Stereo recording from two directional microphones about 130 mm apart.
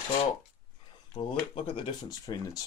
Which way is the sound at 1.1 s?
40° left (ahead or behind).